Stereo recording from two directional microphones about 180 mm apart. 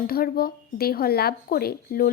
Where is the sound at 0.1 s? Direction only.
55° left (ahead or behind).